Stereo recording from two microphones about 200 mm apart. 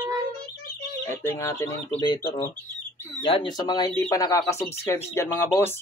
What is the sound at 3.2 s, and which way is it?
Speech, 25° left (ahead or behind).